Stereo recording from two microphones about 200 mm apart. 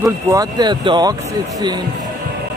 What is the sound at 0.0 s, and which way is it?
Speech, 15° right (ahead or behind).